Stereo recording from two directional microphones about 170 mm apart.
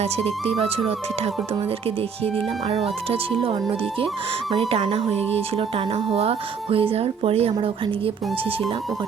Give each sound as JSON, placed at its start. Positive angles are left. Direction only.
{"t": 0.0, "sound": "speech", "side_deg": -35}